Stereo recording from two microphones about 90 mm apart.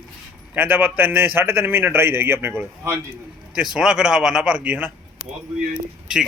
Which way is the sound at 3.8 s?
10° right (ahead or behind).